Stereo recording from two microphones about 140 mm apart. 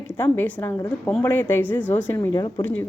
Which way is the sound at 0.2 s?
15° left (ahead or behind).